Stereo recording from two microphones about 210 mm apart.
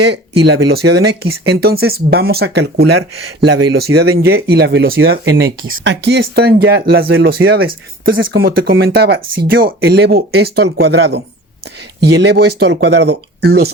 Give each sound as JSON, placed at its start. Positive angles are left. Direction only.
{"t": 0.5, "sound": "speech", "side_deg": -50}